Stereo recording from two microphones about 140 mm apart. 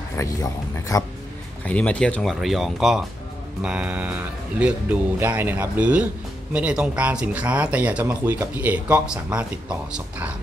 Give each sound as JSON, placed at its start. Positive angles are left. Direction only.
{"t": 0.2, "sound": "speech", "side_deg": 25}
{"t": 1.7, "sound": "speech", "side_deg": 10}